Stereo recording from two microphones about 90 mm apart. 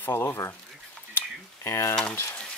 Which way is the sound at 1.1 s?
30° left (ahead or behind).